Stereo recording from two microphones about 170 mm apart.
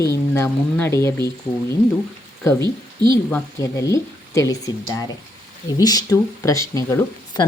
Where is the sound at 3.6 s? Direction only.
20° left (ahead or behind).